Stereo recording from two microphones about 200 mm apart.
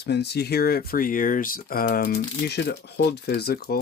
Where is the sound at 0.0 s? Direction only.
55° left (ahead or behind).